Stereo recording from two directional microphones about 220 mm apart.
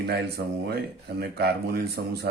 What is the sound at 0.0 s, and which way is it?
Speech, 45° right (ahead or behind).